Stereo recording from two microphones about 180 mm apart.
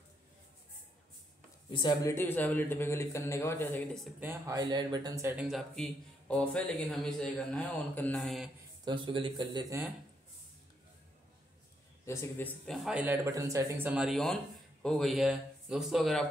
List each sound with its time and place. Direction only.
1.7 s a man's voice: 25° left (ahead or behind)
4.2 s speech: 15° right (ahead or behind)
5.4 s speech: centre (ahead or behind)
8.8 s speech: 25° right (ahead or behind)
12.1 s speech: 15° left (ahead or behind)